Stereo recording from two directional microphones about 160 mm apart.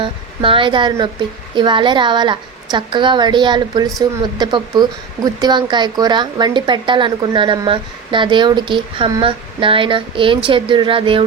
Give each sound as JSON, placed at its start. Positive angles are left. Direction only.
{"t": 0.0, "sound": "speech", "side_deg": -35}